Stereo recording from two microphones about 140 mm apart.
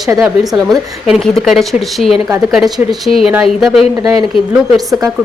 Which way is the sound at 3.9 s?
25° right (ahead or behind).